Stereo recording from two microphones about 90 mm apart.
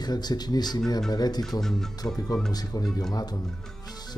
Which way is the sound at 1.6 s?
5° left (ahead or behind).